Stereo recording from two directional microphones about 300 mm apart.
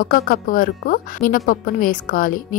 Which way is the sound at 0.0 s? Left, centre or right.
Left.